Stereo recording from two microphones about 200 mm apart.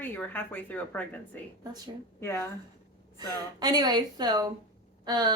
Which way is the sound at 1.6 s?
20° right (ahead or behind).